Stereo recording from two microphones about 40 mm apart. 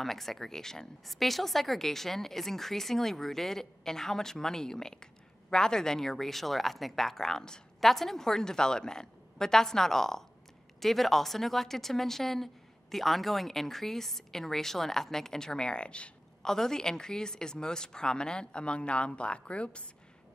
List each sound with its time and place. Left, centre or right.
0.0 s speech: centre
1.0 s speech: centre
7.8 s speech: centre; by 16.1 s left
16.4 s a woman's voice: centre; by 19.9 s left